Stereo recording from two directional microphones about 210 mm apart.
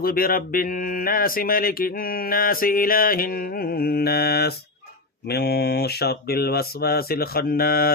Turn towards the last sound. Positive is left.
turn(degrees=45)  # may be behind; listen again after turning